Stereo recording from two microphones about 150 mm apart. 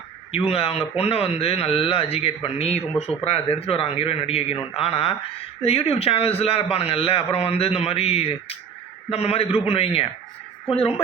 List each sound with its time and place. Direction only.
0.3 s speech: 45° left (ahead or behind)